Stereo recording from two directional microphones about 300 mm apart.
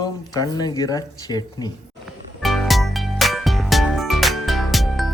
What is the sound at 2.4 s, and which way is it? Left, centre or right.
Music, centre.